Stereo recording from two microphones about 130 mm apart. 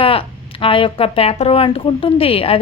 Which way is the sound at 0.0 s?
45° left (ahead or behind).